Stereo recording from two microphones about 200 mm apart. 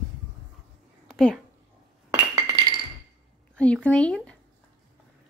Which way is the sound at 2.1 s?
15° right (ahead or behind).